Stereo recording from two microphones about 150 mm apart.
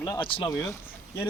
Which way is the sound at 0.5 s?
20° left (ahead or behind).